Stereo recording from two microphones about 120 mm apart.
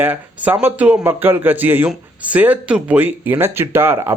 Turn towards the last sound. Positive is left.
turn(degrees=-20)  # may be behind; listen again after turning